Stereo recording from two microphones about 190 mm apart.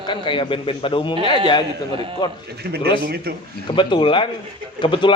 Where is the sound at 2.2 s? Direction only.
25° left (ahead or behind).